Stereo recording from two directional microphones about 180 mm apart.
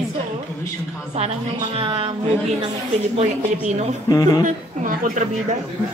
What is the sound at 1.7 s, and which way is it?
Speech, 30° right (ahead or behind).